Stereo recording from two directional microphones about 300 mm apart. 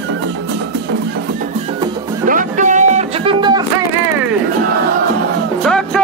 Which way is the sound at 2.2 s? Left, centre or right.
Right.